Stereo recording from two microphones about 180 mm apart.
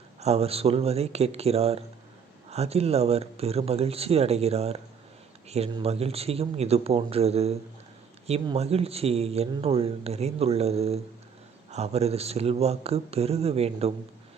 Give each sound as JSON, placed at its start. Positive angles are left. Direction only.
{"t": 0.2, "sound": "speech", "side_deg": -35}